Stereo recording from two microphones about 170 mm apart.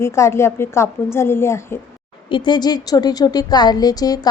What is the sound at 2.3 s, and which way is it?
A woman's voice, 25° left (ahead or behind).